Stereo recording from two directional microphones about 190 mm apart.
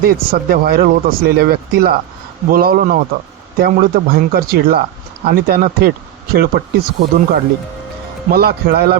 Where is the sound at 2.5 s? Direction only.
50° right (ahead or behind).